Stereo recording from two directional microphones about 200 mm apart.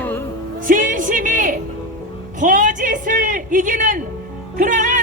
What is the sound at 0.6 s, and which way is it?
Music, 40° right (ahead or behind).